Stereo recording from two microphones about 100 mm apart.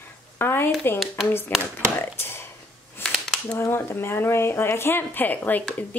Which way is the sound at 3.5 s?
25° left (ahead or behind).